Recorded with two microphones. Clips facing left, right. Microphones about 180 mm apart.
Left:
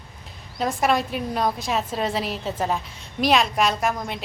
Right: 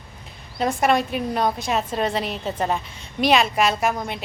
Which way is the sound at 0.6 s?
Centre (ahead or behind).